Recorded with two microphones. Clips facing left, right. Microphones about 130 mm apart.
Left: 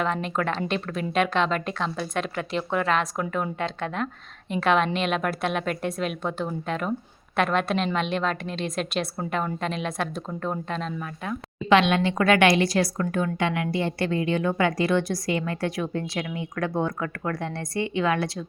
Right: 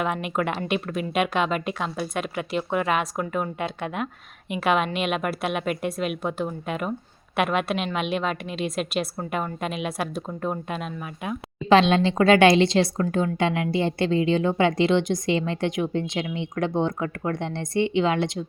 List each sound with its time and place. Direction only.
0.0 s a woman's voice: 10° right (ahead or behind)
11.7 s speech: 30° right (ahead or behind)